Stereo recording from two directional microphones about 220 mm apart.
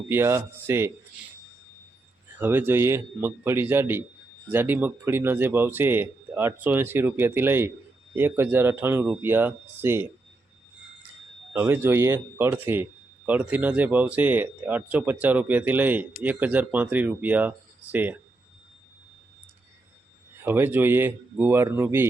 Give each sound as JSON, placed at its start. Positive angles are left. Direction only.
{"t": 0.1, "sound": "speech", "side_deg": -10}
{"t": 2.4, "sound": "speech", "side_deg": -10}
{"t": 11.5, "sound": "speech", "side_deg": -10}
{"t": 20.4, "sound": "speech", "side_deg": -10}